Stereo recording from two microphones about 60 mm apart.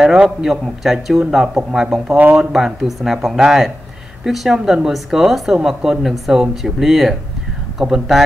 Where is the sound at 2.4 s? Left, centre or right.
Centre.